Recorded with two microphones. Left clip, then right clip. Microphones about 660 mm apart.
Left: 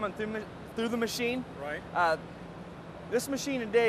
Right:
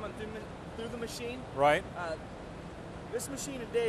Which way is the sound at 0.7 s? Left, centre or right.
Left.